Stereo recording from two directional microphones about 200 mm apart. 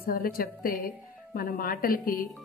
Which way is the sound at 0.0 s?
45° left (ahead or behind).